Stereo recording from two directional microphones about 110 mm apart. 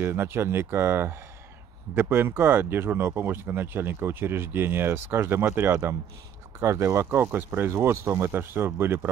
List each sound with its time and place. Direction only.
0.0 s speech: 20° right (ahead or behind)